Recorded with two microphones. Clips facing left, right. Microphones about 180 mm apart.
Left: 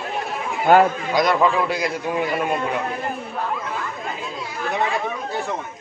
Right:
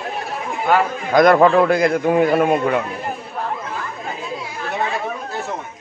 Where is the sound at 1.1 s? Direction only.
55° right (ahead or behind).